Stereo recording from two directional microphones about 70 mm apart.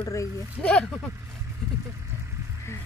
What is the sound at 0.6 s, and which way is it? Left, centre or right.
Speech, centre.